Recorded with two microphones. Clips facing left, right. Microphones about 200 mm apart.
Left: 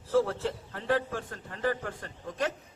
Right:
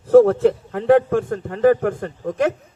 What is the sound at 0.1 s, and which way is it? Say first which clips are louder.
A man's voice: right 15 dB; 55° right (ahead or behind).